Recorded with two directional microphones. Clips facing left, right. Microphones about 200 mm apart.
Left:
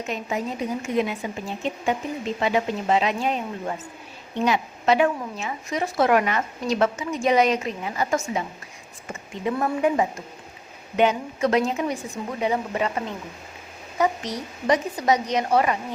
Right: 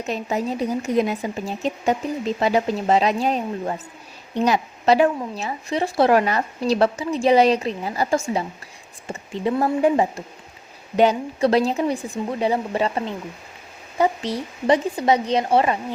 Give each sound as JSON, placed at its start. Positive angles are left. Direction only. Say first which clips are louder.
{"t": 0.1, "sound": "a woman's voice", "louder": "right 5 dB", "side_deg": -35}
{"t": 14.0, "sound": "a woman's voice", "louder": "right 3 dB", "side_deg": -30}